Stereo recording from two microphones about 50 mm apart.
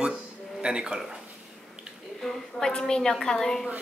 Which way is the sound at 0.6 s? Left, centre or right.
Centre.